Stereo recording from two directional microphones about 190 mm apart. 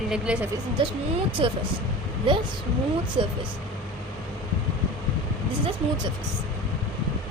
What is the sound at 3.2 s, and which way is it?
Speech, 25° right (ahead or behind).